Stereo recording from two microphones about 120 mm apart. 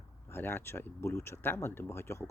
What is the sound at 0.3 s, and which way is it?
Speech, 20° left (ahead or behind).